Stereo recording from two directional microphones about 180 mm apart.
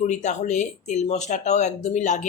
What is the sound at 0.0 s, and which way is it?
Speech, 40° left (ahead or behind).